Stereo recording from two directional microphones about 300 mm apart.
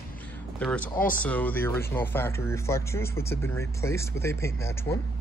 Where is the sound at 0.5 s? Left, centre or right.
Centre.